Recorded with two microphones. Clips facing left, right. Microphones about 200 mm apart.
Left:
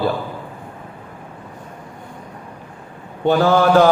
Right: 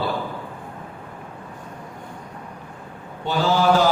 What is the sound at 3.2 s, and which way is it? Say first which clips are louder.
Speech: left 5 dB; 55° left (ahead or behind).